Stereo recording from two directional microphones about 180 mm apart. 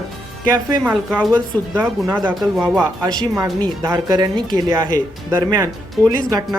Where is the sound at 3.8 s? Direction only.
20° right (ahead or behind).